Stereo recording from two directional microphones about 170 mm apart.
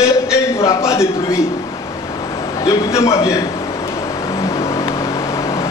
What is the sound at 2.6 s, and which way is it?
Speech, 20° left (ahead or behind).